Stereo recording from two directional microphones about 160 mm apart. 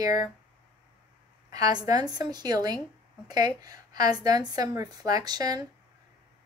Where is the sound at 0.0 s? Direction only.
25° right (ahead or behind).